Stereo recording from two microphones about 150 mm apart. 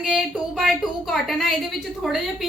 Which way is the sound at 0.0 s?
5° right (ahead or behind).